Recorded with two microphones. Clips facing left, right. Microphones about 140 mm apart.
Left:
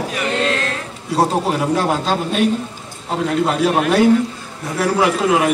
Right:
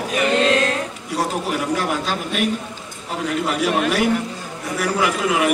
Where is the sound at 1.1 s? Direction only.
30° left (ahead or behind).